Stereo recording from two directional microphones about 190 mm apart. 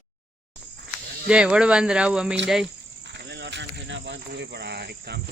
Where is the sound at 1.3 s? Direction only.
5° right (ahead or behind).